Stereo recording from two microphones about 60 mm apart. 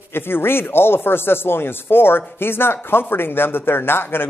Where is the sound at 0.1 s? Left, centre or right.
Left.